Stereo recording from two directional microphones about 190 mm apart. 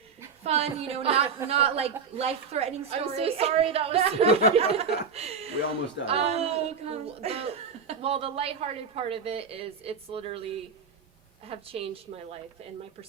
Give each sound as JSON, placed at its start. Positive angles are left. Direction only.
{"t": 0.4, "sound": "speech", "side_deg": -35}